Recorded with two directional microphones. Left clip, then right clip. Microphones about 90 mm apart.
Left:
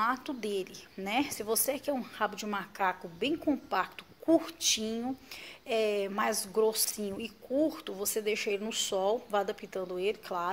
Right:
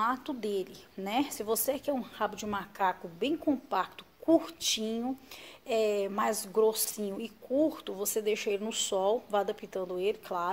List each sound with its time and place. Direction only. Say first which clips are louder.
0.0 s a woman's voice: even; 35° right (ahead or behind)